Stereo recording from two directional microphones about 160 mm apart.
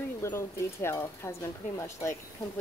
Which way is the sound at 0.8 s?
15° left (ahead or behind).